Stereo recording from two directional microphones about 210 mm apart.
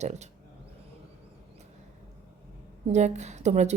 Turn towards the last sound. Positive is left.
turn(degrees=-35)  # may be behind; listen again after turning